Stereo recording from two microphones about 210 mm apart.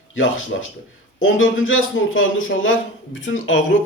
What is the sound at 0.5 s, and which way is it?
Speech, 50° left (ahead or behind).